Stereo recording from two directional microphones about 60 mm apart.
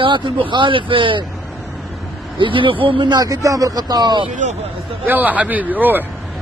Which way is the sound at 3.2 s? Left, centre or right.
Right.